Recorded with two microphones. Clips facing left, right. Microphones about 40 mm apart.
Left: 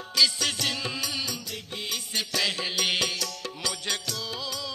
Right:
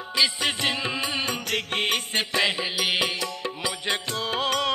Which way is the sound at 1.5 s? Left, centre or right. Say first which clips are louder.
Right 9 dB; right.